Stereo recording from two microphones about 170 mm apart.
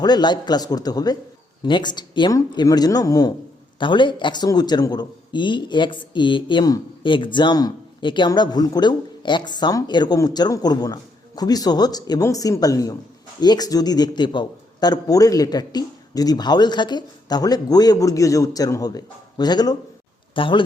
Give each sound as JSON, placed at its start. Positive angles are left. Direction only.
{"t": 0.0, "sound": "a man's voice", "side_deg": 25}